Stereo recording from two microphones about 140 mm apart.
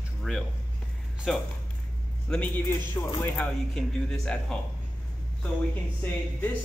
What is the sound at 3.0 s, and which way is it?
Speech, 30° left (ahead or behind).